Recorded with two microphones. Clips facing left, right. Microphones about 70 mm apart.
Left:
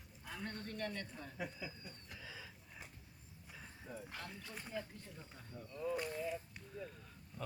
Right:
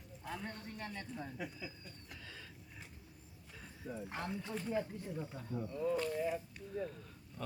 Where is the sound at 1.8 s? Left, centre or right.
Centre.